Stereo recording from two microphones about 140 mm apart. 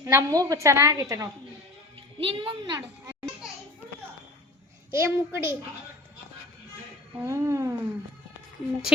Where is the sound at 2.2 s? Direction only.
35° right (ahead or behind).